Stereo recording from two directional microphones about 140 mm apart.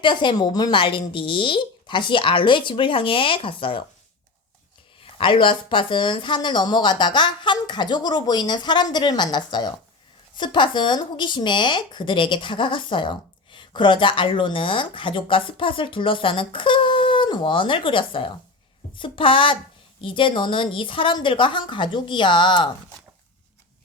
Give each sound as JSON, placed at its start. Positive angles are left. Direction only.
{"t": 0.0, "sound": "speech", "side_deg": 35}
{"t": 4.9, "sound": "speech", "side_deg": 40}